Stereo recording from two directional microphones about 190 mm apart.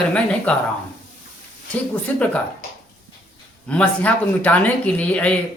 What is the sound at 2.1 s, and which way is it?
Speech, 10° left (ahead or behind).